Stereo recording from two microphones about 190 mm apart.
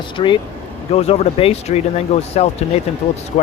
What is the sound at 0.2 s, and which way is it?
Speech, 25° left (ahead or behind).